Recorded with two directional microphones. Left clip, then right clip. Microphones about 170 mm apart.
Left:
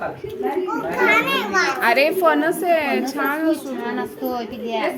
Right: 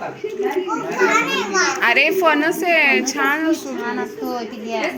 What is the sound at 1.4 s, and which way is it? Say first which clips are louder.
Speech: right 1 dB; 20° left (ahead or behind).